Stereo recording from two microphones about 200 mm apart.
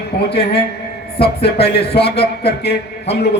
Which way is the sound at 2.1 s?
55° left (ahead or behind).